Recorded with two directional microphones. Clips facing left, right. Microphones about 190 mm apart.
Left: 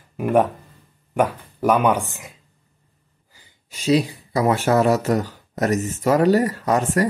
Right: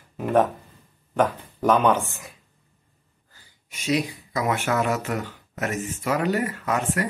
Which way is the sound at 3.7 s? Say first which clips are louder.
Left 6 dB; 30° left (ahead or behind).